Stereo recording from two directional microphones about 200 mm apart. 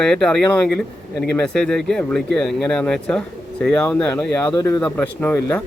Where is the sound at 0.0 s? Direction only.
5° left (ahead or behind).